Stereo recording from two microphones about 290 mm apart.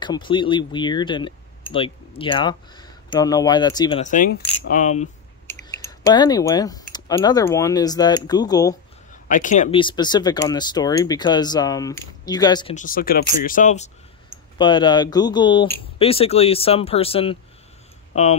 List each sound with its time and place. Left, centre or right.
0.0 s speech: centre
4.0 s speech: left
5.5 s a sound: centre
5.9 s speech: centre
9.1 s speech: left
12.7 s speech: left